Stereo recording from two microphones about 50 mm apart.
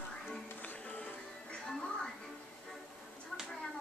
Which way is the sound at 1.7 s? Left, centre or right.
Centre.